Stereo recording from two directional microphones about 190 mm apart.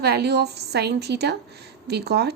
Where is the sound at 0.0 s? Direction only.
60° right (ahead or behind).